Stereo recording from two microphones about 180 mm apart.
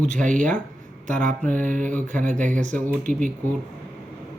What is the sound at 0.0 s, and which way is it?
Speech, 45° right (ahead or behind).